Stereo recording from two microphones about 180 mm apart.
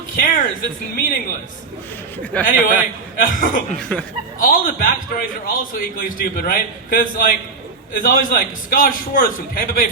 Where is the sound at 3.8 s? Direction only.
5° left (ahead or behind).